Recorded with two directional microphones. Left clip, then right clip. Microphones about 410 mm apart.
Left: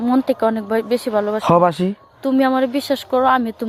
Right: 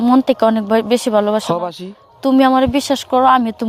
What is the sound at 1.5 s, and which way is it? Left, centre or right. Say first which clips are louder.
Speech: left 6 dB; left.